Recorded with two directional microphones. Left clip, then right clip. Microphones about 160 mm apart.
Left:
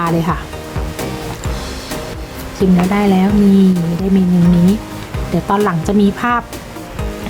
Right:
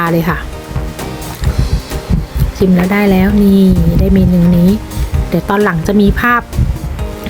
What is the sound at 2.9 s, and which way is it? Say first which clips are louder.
Speech: right 3 dB; 15° right (ahead or behind).